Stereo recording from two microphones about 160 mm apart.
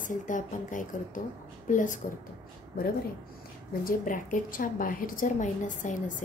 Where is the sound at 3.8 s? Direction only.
55° left (ahead or behind).